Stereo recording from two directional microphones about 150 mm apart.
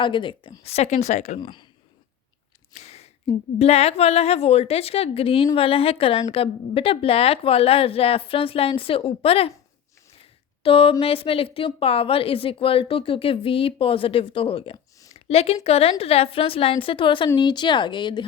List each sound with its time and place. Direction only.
0.0 s a woman's voice: 35° left (ahead or behind); by 1.4 s 50° left (ahead or behind)
1.4 s a woman's voice: 30° left (ahead or behind)
2.7 s a sound: 45° left (ahead or behind)
3.6 s a woman's voice: 45° left (ahead or behind)
10.6 s a woman's voice: 40° left (ahead or behind)
15.1 s a sound: 40° left (ahead or behind)
15.6 s a woman's voice: 40° left (ahead or behind)